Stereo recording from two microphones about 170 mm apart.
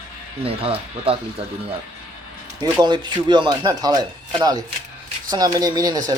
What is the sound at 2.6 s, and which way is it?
Speech, 25° right (ahead or behind).